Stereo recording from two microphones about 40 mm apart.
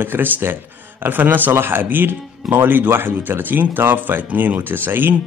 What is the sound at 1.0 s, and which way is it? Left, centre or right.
Speech, right.